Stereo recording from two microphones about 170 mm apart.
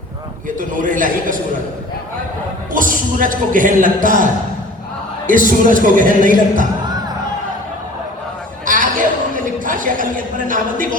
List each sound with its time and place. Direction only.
0.4 s speech: 50° right (ahead or behind)
2.7 s speech: 50° right (ahead or behind)
8.6 s a sound: 50° right (ahead or behind)